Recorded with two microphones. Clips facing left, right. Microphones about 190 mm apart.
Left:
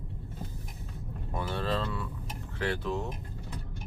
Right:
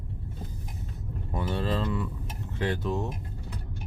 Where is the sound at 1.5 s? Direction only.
15° right (ahead or behind).